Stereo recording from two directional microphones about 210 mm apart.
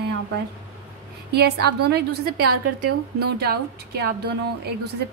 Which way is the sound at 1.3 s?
50° right (ahead or behind).